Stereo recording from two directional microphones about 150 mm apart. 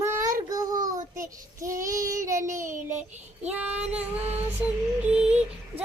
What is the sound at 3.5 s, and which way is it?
Child singing, 10° right (ahead or behind).